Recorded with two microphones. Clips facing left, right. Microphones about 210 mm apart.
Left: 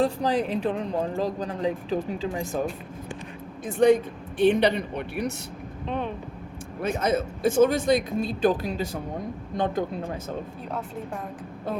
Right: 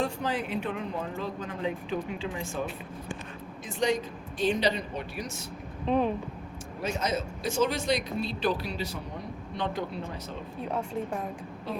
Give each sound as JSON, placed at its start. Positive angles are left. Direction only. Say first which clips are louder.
{"t": 0.0, "sound": "speech", "louder": "left 7 dB", "side_deg": 35}
{"t": 3.7, "sound": "speech", "louder": "left 9 dB", "side_deg": 55}
{"t": 5.8, "sound": "speech", "louder": "right 4 dB", "side_deg": 0}
{"t": 6.8, "sound": "speech", "louder": "left 6 dB", "side_deg": 55}